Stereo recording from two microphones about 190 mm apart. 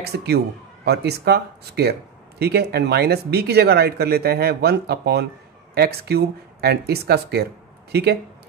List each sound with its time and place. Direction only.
0.0 s speech: 60° right (ahead or behind)